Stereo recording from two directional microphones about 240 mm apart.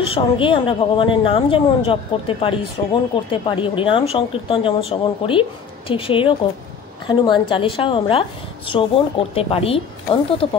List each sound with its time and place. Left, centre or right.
0.1 s a woman's voice: left